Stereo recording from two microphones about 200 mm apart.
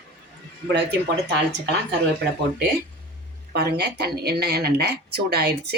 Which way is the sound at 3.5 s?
55° right (ahead or behind).